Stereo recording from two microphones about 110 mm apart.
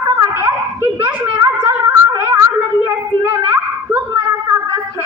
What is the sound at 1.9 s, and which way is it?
Gargling, 25° right (ahead or behind).